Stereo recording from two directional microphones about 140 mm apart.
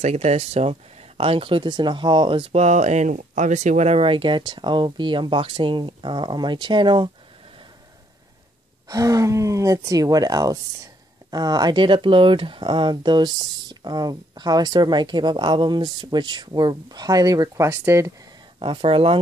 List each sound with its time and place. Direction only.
0.0 s speech: 50° right (ahead or behind); by 7.1 s 35° right (ahead or behind)
8.8 s speech: 25° right (ahead or behind)
18.6 s speech: 40° right (ahead or behind)